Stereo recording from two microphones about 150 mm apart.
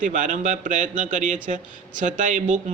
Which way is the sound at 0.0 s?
60° right (ahead or behind).